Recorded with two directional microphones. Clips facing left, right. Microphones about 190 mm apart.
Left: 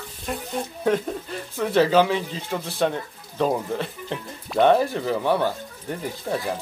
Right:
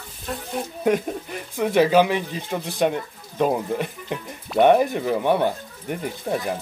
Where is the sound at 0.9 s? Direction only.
15° right (ahead or behind).